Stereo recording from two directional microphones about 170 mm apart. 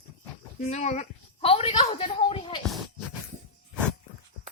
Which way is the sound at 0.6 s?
40° left (ahead or behind).